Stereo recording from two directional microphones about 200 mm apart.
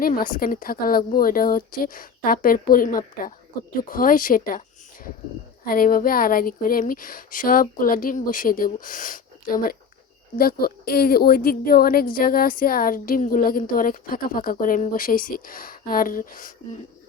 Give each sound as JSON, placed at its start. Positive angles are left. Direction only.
{"t": 0.0, "sound": "a woman's voice", "side_deg": 45}
{"t": 5.6, "sound": "a woman's voice", "side_deg": 45}